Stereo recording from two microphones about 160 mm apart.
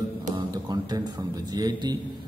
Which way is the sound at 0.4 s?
25° right (ahead or behind).